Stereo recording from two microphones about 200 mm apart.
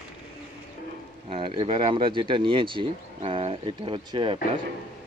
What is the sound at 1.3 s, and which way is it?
Speech, 25° right (ahead or behind).